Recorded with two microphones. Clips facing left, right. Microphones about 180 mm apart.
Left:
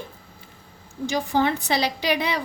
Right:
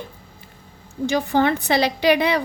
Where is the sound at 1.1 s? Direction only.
60° right (ahead or behind).